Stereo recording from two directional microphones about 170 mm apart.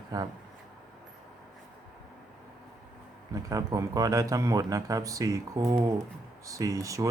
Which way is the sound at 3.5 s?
20° right (ahead or behind).